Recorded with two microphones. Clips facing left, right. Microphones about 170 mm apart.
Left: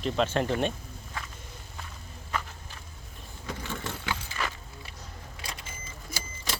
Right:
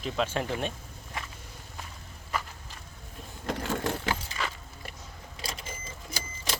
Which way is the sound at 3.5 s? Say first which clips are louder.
Right 6 dB; 60° right (ahead or behind).